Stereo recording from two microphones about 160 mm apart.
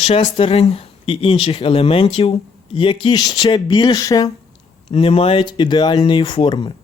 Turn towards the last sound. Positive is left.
turn(degrees=30)  # may be behind; listen again after turning